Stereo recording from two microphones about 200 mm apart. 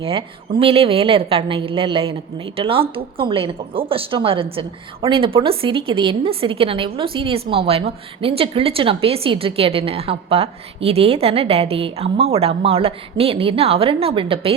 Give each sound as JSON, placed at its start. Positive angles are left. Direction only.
{"t": 0.0, "sound": "speech", "side_deg": -25}